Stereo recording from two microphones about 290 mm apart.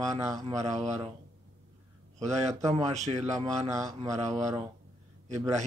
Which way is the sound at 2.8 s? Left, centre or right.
Right.